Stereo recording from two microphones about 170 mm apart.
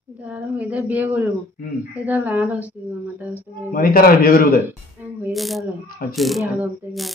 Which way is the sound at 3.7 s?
60° left (ahead or behind).